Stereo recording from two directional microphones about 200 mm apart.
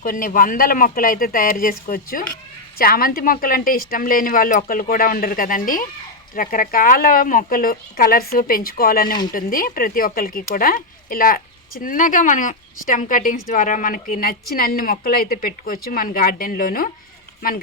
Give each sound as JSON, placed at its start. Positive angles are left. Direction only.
{"t": 0.0, "sound": "speech", "side_deg": 45}